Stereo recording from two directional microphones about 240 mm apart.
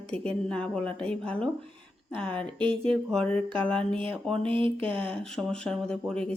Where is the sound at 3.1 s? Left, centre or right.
Centre.